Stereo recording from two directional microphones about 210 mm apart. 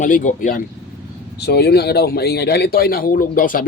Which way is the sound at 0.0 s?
35° left (ahead or behind).